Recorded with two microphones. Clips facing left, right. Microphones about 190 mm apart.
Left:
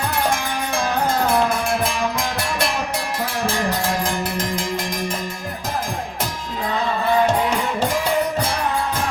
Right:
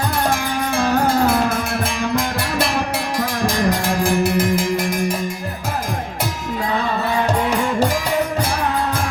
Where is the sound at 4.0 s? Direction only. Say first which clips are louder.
Right 6 dB; 10° right (ahead or behind).